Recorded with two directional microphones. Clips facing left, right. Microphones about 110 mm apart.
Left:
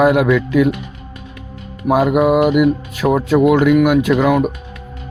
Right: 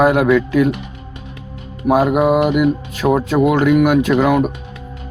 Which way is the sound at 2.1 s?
5° left (ahead or behind).